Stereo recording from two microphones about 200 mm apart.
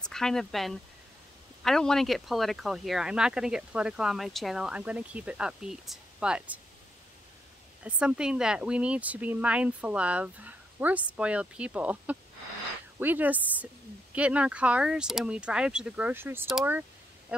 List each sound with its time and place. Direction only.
0.0 s speech: centre (ahead or behind)
7.8 s speech: 5° right (ahead or behind)
17.3 s quack: 5° right (ahead or behind)